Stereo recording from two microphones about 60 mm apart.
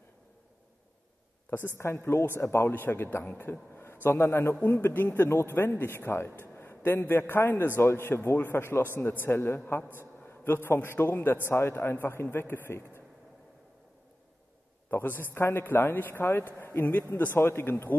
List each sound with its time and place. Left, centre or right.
1.8 s a man's voice: left
4.6 s a man's voice: left
14.9 s a man's voice: left